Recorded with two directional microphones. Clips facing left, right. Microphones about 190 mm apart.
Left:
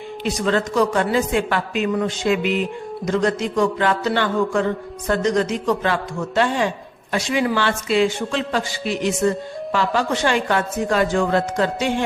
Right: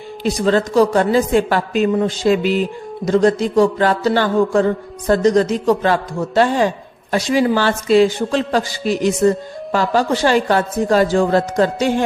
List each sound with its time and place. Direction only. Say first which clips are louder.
0.3 s speech: right 5 dB; 35° right (ahead or behind)